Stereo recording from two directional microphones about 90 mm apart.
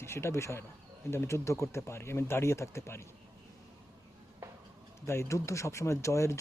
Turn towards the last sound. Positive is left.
turn(degrees=35)  # may be behind; listen again after turning